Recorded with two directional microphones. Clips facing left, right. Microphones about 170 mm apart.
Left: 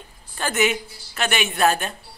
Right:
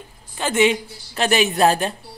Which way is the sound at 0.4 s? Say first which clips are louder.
Right 4 dB; 25° right (ahead or behind).